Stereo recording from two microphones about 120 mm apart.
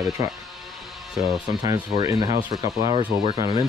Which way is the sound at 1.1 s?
Centre (ahead or behind).